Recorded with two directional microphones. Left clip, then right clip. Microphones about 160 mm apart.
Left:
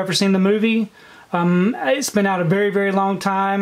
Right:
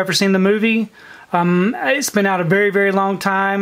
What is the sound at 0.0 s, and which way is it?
Speech, 30° right (ahead or behind).